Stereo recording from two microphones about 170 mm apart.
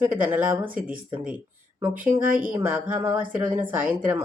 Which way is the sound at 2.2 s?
55° right (ahead or behind).